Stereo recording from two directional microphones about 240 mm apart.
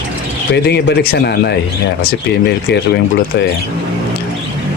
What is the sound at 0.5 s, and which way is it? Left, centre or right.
Speech, left.